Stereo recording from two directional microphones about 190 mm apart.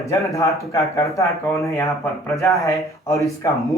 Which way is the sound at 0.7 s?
15° left (ahead or behind).